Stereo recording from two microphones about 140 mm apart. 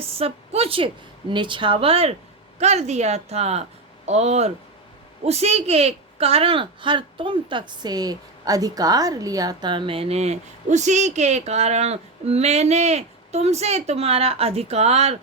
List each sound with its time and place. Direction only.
0.0 s a woman's voice: 45° right (ahead or behind)